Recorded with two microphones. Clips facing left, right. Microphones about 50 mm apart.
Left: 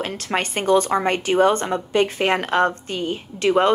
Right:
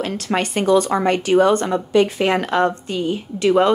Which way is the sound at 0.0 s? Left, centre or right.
Left.